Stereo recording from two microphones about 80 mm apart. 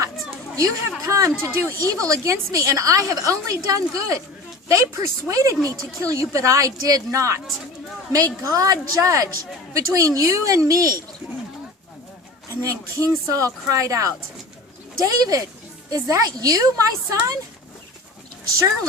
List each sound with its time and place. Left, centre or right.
0.5 s a woman's voice: right
12.6 s speech: right